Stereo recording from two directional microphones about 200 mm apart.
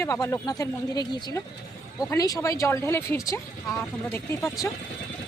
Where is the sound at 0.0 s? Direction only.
15° left (ahead or behind).